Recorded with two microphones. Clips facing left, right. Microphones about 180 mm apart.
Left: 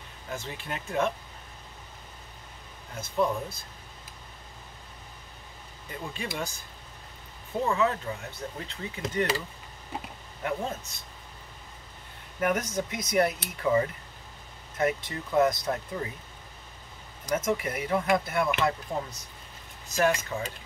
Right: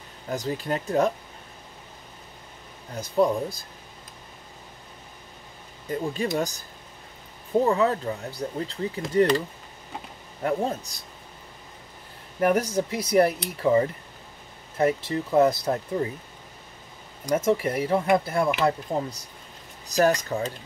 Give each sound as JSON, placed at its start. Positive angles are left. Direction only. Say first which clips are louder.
{"t": 0.3, "sound": "speech", "louder": "right 9 dB", "side_deg": -40}
{"t": 2.9, "sound": "speech", "louder": "right 5 dB", "side_deg": -35}
{"t": 5.9, "sound": "speech", "louder": "right 9 dB", "side_deg": -40}
{"t": 7.6, "sound": "speech", "louder": "right 2 dB", "side_deg": -35}
{"t": 10.4, "sound": "speech", "louder": "right 6 dB", "side_deg": -35}
{"t": 12.4, "sound": "speech", "louder": "right 6 dB", "side_deg": -35}
{"t": 17.4, "sound": "speech", "louder": "right 8 dB", "side_deg": -30}